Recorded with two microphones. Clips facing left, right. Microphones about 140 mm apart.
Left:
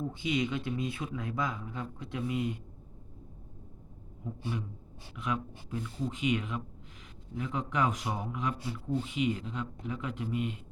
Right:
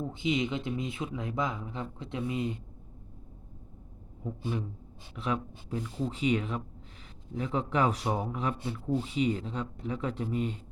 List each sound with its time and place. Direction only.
0.1 s speech: 20° right (ahead or behind)
5.1 s speech: 30° right (ahead or behind)